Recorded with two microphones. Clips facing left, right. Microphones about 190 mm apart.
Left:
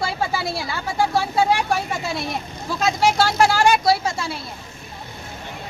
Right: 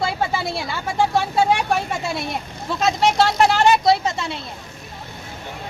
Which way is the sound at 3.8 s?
20° right (ahead or behind).